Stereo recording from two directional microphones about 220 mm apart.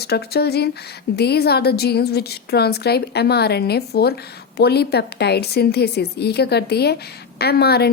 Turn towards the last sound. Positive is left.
turn(degrees=45)  # may be behind; listen again after turning